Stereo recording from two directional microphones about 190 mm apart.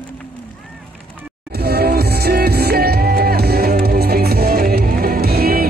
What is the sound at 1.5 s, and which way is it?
Music, 55° right (ahead or behind).